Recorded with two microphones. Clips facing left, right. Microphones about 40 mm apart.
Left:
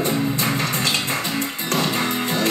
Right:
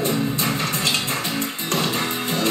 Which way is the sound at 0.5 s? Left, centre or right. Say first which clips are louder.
Left 1 dB; left.